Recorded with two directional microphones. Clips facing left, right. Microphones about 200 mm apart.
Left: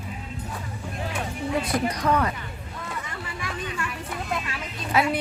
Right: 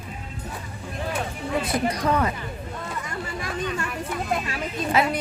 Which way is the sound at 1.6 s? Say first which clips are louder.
Right 1 dB; 10° right (ahead or behind).